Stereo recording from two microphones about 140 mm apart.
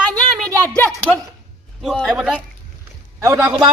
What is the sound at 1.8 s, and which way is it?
Speech, centre (ahead or behind).